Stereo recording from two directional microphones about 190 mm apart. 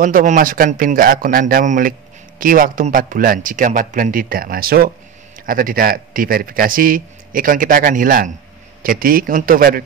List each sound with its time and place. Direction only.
0.0 s speech: 45° right (ahead or behind)